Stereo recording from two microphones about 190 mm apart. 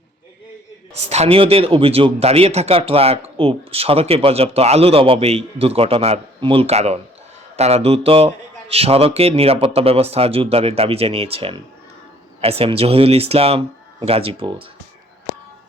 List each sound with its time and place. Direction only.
1.0 s speech: 35° right (ahead or behind)